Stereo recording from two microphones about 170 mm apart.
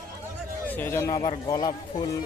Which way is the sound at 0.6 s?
10° left (ahead or behind).